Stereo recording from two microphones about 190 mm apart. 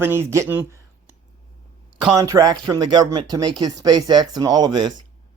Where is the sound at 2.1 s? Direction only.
15° right (ahead or behind).